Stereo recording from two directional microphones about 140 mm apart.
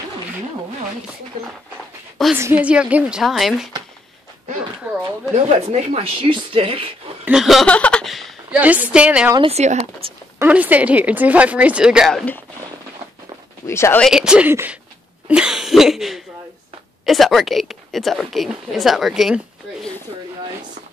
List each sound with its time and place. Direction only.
2.3 s a woman's voice: 15° right (ahead or behind)
5.3 s speech: 50° right (ahead or behind)
7.2 s speech: centre (ahead or behind)
7.7 s a sound: 10° left (ahead or behind)
8.5 s a woman's voice: 10° right (ahead or behind)
9.5 s speech: 50° right (ahead or behind)
10.4 s a woman's voice: 10° right (ahead or behind)
13.7 s speech: 20° left (ahead or behind)
14.1 s a woman's voice: 5° right (ahead or behind)